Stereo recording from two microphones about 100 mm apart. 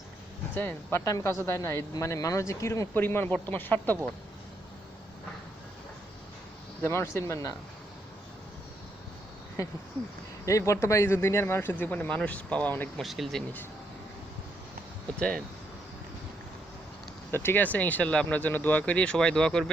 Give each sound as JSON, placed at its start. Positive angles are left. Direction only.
{"t": 0.5, "sound": "a man's voice", "side_deg": 20}
{"t": 1.0, "sound": "a man's voice", "side_deg": 35}
{"t": 6.8, "sound": "a man's voice", "side_deg": 25}
{"t": 10.4, "sound": "a man's voice", "side_deg": 30}
{"t": 13.0, "sound": "speech", "side_deg": 0}
{"t": 15.2, "sound": "speech", "side_deg": 10}
{"t": 17.3, "sound": "speech", "side_deg": 20}